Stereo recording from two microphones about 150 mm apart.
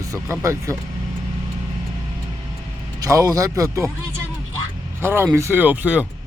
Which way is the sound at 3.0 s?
20° right (ahead or behind).